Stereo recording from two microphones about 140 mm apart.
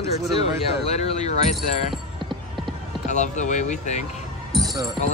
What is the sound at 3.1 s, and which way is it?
Speech, 60° left (ahead or behind).